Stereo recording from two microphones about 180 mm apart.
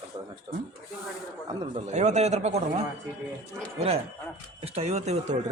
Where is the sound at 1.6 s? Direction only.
35° right (ahead or behind).